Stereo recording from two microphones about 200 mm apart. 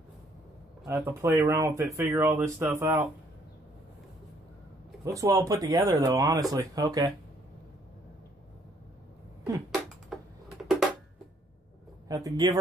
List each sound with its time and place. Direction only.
1.0 s speech: 15° right (ahead or behind)
5.0 s speech: 15° right (ahead or behind)
10.1 s typing: centre (ahead or behind)
10.6 s a sound: centre (ahead or behind)
12.1 s speech: 15° right (ahead or behind)